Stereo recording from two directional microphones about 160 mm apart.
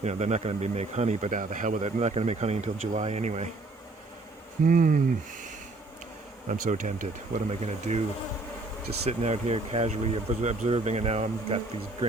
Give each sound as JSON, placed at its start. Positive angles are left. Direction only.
{"t": 0.0, "sound": "speech", "side_deg": -45}
{"t": 4.6, "sound": "speech", "side_deg": -60}
{"t": 6.5, "sound": "speech", "side_deg": -50}
{"t": 9.0, "sound": "speech", "side_deg": -40}